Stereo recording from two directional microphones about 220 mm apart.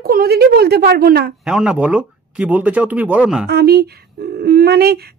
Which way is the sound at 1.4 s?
5° right (ahead or behind).